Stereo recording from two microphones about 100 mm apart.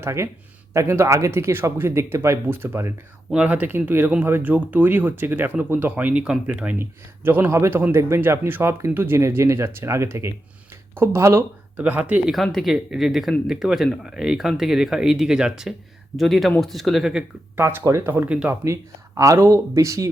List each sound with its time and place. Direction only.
0.0 s speech: 30° right (ahead or behind)
3.2 s speech: 10° right (ahead or behind)
12.3 s speech: centre (ahead or behind)
17.6 s speech: 25° right (ahead or behind)
18.3 s speech: 10° right (ahead or behind)
18.6 s speech: 30° right (ahead or behind)